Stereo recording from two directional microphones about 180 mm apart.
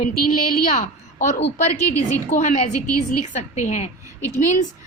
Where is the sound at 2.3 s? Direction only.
45° left (ahead or behind).